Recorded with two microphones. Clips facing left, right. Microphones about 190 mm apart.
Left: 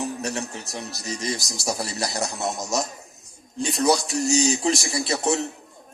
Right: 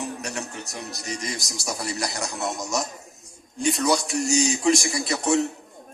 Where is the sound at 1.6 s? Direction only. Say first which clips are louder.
Left 2 dB; 30° left (ahead or behind).